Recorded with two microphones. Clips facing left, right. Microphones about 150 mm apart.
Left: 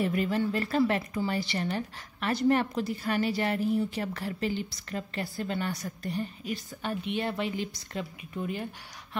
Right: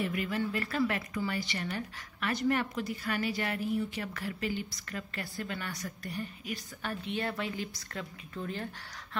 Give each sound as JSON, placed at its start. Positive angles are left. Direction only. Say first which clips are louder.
{"t": 0.0, "sound": "a woman's voice", "louder": "left 5 dB", "side_deg": 35}